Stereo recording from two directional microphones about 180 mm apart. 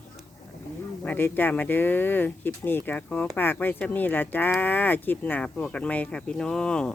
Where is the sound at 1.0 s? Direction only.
10° left (ahead or behind).